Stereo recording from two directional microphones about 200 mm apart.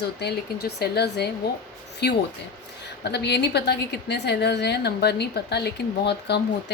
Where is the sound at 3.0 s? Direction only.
55° left (ahead or behind).